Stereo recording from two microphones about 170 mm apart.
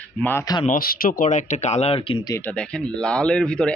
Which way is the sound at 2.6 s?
5° left (ahead or behind).